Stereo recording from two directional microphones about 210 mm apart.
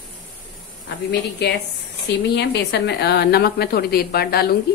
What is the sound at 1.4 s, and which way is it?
A woman's voice, 55° left (ahead or behind).